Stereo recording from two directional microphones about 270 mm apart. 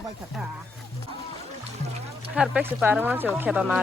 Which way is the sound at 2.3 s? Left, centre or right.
Centre.